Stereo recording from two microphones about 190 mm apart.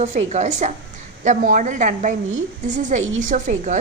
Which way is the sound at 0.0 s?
40° right (ahead or behind).